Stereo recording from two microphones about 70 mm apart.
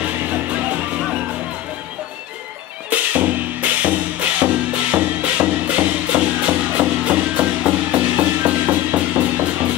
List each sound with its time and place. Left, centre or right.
0.0 s music: right
2.9 s music: right